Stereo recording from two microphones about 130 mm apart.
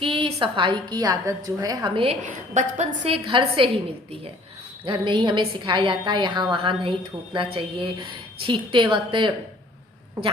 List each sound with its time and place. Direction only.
0.0 s a woman's voice: 45° right (ahead or behind); by 1.9 s 30° right (ahead or behind)
2.2 s a woman's voice: 75° right (ahead or behind)
3.0 s a woman's voice: 45° right (ahead or behind)
4.9 s a woman's voice: 35° right (ahead or behind)